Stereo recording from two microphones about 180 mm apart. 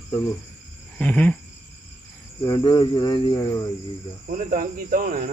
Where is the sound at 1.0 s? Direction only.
10° left (ahead or behind).